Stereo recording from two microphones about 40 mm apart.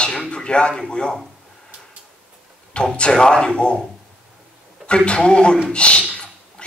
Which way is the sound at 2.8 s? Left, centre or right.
Left.